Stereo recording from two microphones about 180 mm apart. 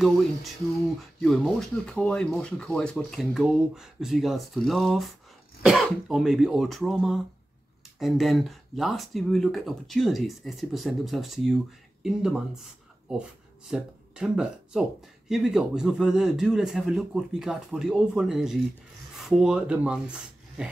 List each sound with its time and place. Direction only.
1.2 s speech: centre (ahead or behind)
13.7 s speech: 5° right (ahead or behind)